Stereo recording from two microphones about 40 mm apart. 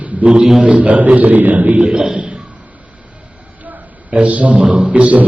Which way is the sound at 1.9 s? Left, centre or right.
Centre.